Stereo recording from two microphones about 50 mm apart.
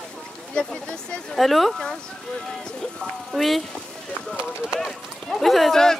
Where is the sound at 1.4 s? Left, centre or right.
Centre.